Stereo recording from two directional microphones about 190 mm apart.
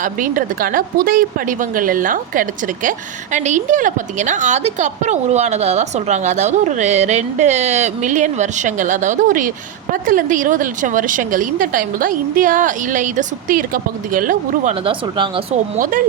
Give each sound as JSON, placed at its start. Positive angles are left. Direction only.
{"t": 0.0, "sound": "a woman's voice", "side_deg": -45}
{"t": 15.7, "sound": "speech", "side_deg": -45}